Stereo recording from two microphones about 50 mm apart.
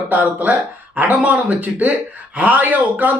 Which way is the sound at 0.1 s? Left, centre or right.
Right.